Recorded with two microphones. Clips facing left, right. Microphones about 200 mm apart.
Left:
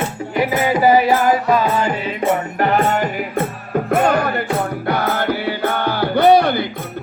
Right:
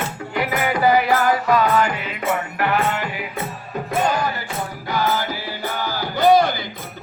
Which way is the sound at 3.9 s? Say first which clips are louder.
Left 5 dB; 60° left (ahead or behind).